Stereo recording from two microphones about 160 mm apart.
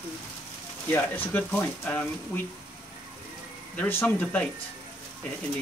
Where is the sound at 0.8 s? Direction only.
10° left (ahead or behind).